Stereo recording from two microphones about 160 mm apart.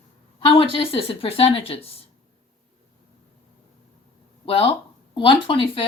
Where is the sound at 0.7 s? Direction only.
35° left (ahead or behind).